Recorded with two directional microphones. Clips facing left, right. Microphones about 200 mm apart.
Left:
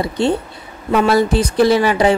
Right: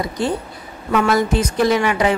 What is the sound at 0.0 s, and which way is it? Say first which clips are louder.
A woman's voice: left 4 dB; 25° left (ahead or behind).